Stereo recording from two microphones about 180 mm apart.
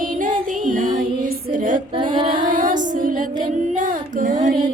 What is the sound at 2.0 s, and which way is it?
Female singing, 25° right (ahead or behind).